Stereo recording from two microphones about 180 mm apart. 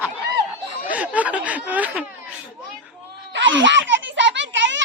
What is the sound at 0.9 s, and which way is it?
Snicker, 10° right (ahead or behind).